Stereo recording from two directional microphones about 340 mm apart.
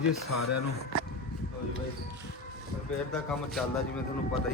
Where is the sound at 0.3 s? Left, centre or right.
Left.